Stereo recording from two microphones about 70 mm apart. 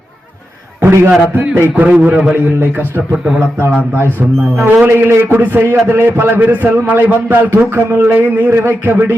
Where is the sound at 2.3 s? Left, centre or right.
Right.